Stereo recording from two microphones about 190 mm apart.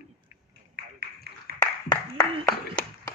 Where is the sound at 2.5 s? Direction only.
15° left (ahead or behind).